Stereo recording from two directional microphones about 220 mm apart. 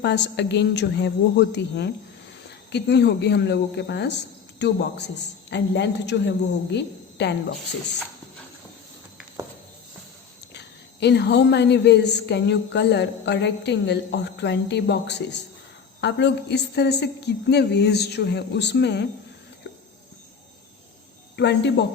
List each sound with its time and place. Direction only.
0.0 s a woman's voice: 50° left (ahead or behind)
10.5 s a woman's voice: 50° left (ahead or behind)
21.3 s a woman's voice: 50° left (ahead or behind)